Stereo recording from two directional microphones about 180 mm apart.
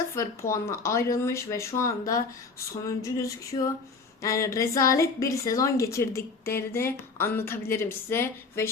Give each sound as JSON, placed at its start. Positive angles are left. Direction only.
{"t": 0.1, "sound": "a woman's voice", "side_deg": 15}
{"t": 2.8, "sound": "a sound", "side_deg": 20}
{"t": 4.2, "sound": "a woman's voice", "side_deg": 15}